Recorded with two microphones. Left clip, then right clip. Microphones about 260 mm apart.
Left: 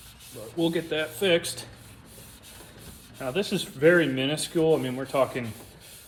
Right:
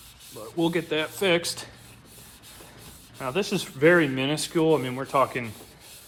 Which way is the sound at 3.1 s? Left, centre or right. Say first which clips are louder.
Right 1 dB; right.